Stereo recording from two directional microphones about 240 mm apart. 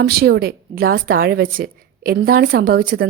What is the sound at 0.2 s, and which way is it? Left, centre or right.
A woman's voice, right.